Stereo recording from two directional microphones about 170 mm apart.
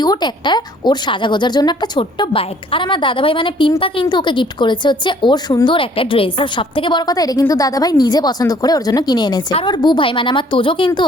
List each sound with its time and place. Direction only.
0.0 s a woman's voice: 25° left (ahead or behind)